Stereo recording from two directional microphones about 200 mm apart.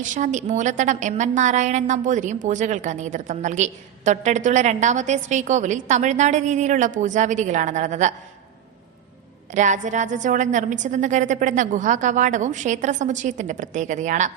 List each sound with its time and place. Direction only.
0.0 s a woman's voice: 40° right (ahead or behind)
9.5 s a woman's voice: 35° right (ahead or behind)